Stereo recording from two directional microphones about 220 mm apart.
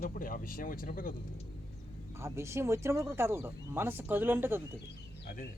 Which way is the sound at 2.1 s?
10° right (ahead or behind).